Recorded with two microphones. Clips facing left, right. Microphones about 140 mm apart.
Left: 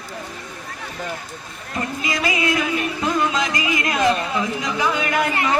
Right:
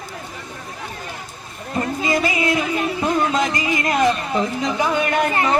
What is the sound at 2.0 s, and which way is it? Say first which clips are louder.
Music: right 2 dB; 30° right (ahead or behind).